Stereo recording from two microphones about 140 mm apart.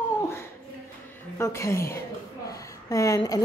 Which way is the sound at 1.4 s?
20° left (ahead or behind).